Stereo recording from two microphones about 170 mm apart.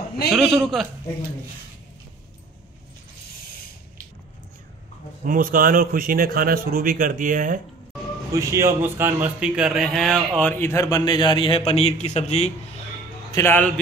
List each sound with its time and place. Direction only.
0.3 s a man's voice: centre (ahead or behind)
5.2 s a man's voice: 55° right (ahead or behind)
8.3 s a man's voice: 20° right (ahead or behind); by 12.5 s 40° left (ahead or behind)
13.3 s a man's voice: 15° left (ahead or behind)